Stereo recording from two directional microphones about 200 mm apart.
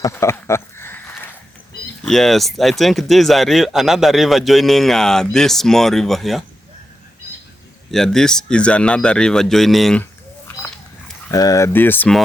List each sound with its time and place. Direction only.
0.0 s a sound: 15° left (ahead or behind)
2.0 s speech: centre (ahead or behind)
7.9 s speech: centre (ahead or behind)
11.3 s speech: 15° left (ahead or behind)